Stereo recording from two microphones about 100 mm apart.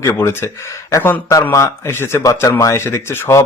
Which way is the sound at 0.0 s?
30° left (ahead or behind).